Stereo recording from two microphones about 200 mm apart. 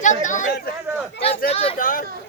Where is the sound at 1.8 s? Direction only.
45° left (ahead or behind).